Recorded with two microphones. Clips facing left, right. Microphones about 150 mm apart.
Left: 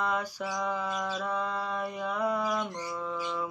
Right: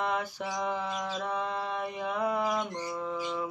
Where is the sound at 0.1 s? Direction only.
20° right (ahead or behind).